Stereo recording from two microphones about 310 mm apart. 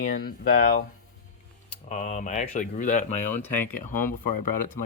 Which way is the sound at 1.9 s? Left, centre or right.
Left.